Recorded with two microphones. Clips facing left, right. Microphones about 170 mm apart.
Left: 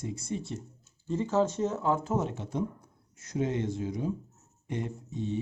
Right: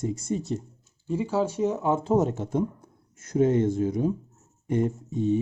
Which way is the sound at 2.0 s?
35° right (ahead or behind).